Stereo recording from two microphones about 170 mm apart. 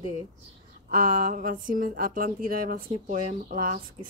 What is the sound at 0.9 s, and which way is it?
Speech, 55° right (ahead or behind).